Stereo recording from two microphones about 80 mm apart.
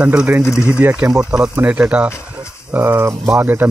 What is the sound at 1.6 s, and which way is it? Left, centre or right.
Speech, centre.